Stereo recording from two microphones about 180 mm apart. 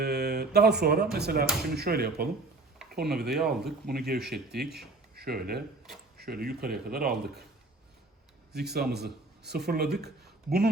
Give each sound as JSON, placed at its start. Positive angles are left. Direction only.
{"t": 0.0, "sound": "a man's voice", "side_deg": -65}
{"t": 3.2, "sound": "speech", "side_deg": 0}
{"t": 3.8, "sound": "a man's voice", "side_deg": -60}
{"t": 8.5, "sound": "a man's voice", "side_deg": -65}